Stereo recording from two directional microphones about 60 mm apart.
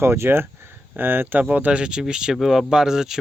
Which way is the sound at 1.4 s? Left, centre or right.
Right.